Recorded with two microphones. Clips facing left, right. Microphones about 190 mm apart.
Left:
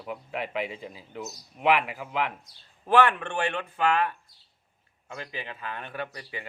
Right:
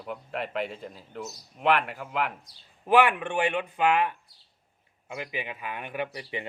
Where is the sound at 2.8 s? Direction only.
15° right (ahead or behind).